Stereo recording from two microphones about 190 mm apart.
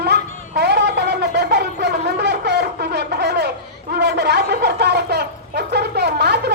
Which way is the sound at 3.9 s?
60° right (ahead or behind).